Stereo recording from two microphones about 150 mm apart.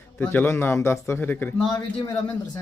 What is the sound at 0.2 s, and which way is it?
A man's voice, 15° left (ahead or behind).